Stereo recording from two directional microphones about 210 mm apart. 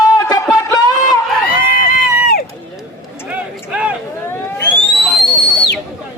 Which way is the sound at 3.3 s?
5° right (ahead or behind).